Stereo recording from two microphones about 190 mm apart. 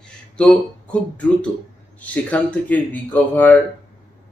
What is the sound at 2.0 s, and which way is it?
Speech, 10° left (ahead or behind).